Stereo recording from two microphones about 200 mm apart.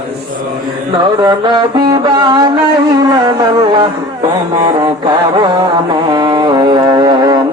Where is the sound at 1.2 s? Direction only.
20° right (ahead or behind).